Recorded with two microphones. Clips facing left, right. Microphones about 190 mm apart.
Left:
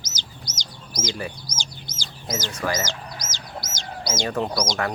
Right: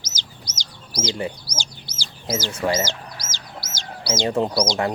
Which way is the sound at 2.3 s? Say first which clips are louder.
Right 4 dB; 25° right (ahead or behind).